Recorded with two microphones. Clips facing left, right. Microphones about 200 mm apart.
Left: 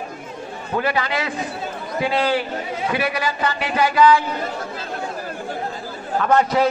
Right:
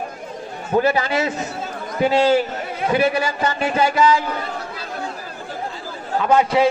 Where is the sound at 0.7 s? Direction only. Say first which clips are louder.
Right 4 dB; 25° right (ahead or behind).